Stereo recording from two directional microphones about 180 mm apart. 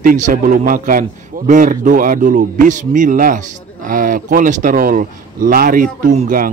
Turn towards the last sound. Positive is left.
turn(degrees=-50)  # may be behind; listen again after turning